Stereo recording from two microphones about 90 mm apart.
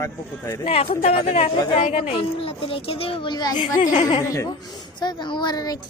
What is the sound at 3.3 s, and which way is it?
Speech, 50° left (ahead or behind).